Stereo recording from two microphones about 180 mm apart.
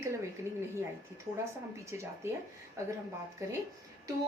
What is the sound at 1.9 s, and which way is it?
Speech, 15° right (ahead or behind).